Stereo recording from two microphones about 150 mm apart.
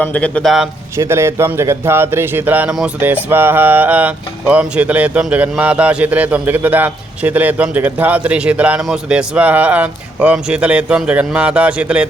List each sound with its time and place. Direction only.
0.0 s a man's voice: 10° left (ahead or behind)
0.9 s a man's voice: 20° right (ahead or behind)